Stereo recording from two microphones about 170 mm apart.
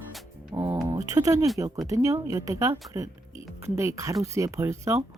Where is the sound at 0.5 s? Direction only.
25° right (ahead or behind).